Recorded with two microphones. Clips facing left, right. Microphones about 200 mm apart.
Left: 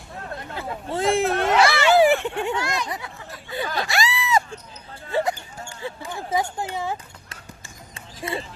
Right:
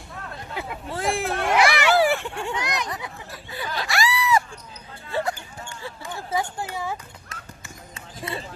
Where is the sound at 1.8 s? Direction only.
20° left (ahead or behind).